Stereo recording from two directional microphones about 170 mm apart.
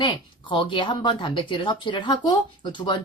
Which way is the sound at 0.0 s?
30° left (ahead or behind).